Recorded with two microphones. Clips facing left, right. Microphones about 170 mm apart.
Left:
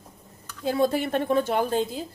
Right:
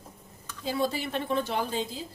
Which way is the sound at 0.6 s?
55° left (ahead or behind).